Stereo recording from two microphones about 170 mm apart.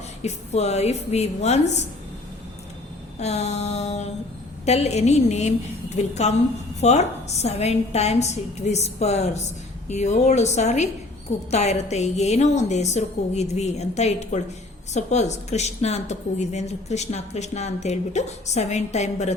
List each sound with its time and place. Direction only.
0.2 s a woman's voice: 40° left (ahead or behind)
3.2 s a woman's voice: 40° left (ahead or behind)